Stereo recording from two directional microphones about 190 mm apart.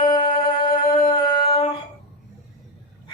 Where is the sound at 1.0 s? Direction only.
30° left (ahead or behind).